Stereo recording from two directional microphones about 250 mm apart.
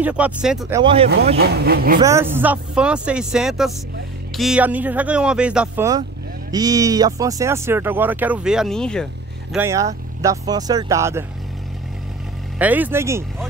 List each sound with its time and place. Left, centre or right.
0.0 s speech: centre
0.7 s speech: right
1.4 s speech: right
2.0 s speech: centre
9.6 s speech: centre
12.5 s speech: centre